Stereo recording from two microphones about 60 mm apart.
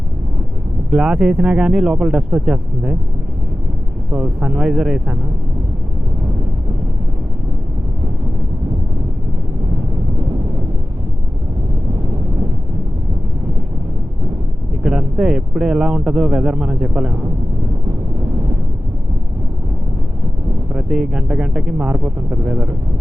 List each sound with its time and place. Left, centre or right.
0.9 s speech: centre
4.1 s speech: centre
14.8 s speech: centre
20.9 s speech: centre